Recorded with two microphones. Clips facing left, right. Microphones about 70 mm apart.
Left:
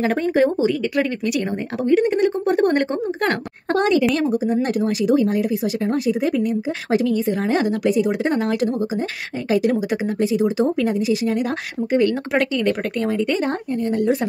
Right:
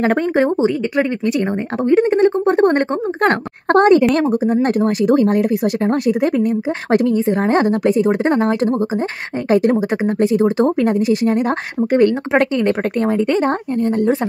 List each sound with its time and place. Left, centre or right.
0.0 s speech: right
3.6 s speech: right
7.1 s a woman's voice: right
7.4 s speech: right
12.1 s speech: right